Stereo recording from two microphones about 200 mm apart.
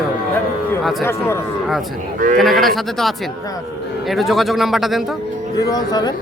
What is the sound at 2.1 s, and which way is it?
Speech, 40° right (ahead or behind).